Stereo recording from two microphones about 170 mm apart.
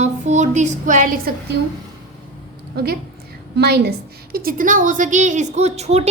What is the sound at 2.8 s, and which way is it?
A woman's voice, 65° right (ahead or behind).